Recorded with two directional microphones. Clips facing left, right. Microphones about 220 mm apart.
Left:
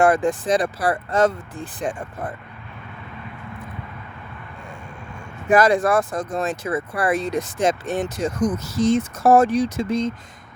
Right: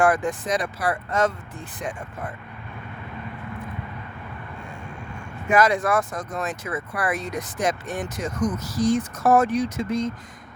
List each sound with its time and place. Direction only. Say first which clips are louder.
0.0 s speech: left 3 dB; 30° left (ahead or behind)
5.5 s speech: left 3 dB; 30° left (ahead or behind)